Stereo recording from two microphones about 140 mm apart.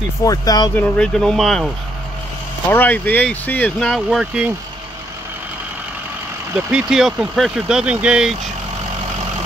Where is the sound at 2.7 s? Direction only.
10° left (ahead or behind); by 4.5 s 5° right (ahead or behind).